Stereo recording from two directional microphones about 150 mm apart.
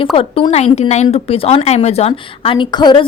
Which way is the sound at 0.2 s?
40° left (ahead or behind).